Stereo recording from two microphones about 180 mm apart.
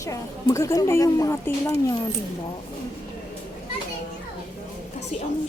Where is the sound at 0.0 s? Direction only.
15° left (ahead or behind).